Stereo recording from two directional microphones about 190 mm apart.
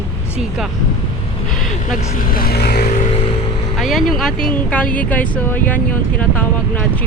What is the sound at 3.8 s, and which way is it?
Speech, centre (ahead or behind).